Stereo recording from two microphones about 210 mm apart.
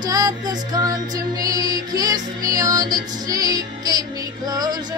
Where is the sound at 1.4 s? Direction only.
15° right (ahead or behind).